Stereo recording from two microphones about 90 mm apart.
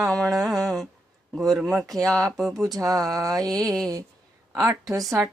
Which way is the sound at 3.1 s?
40° right (ahead or behind).